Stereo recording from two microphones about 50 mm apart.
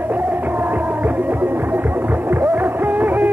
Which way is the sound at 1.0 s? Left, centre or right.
Right.